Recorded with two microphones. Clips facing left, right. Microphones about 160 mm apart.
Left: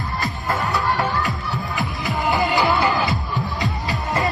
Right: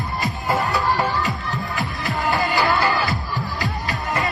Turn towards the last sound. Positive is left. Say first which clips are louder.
# left 2 dB
turn(degrees=20)  # may be behind; listen again after turning